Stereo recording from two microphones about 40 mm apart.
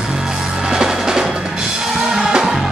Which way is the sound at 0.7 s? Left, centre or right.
Centre.